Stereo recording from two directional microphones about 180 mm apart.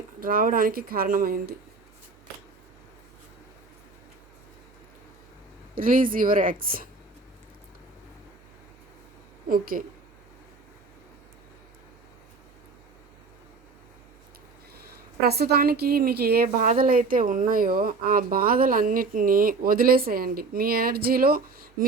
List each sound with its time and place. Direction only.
0.2 s speech: 50° right (ahead or behind)
5.7 s speech: 50° right (ahead or behind)
9.5 s speech: 50° right (ahead or behind)
15.2 s a woman's voice: 60° right (ahead or behind)